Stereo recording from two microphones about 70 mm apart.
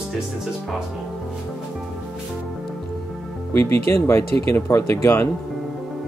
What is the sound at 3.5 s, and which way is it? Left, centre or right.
Speech, left.